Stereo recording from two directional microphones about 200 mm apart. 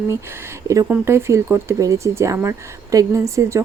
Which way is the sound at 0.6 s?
15° right (ahead or behind).